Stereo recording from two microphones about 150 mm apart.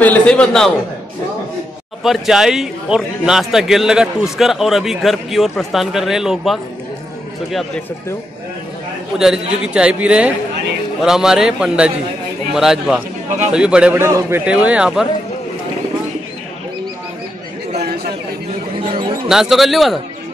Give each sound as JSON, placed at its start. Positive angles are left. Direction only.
{"t": 0.0, "sound": "a man's voice", "side_deg": 10}
{"t": 2.0, "sound": "a man's voice", "side_deg": -5}
{"t": 9.2, "sound": "a man's voice", "side_deg": -5}
{"t": 17.7, "sound": "chatter", "side_deg": -90}
{"t": 19.2, "sound": "a man's voice", "side_deg": -5}